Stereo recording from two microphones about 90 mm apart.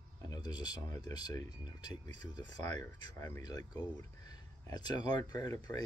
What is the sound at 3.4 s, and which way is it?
Speech, 50° left (ahead or behind).